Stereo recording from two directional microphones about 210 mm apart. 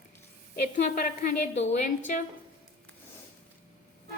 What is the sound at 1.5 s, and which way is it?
Speech, 35° left (ahead or behind).